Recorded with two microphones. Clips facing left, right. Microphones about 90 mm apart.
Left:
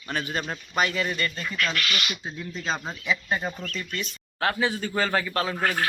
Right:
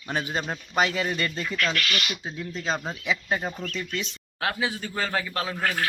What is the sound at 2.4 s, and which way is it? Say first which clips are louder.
Speech: right 1 dB; 5° left (ahead or behind).